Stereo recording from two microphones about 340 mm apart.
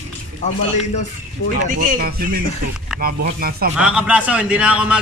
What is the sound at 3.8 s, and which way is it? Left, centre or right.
A man's voice, centre.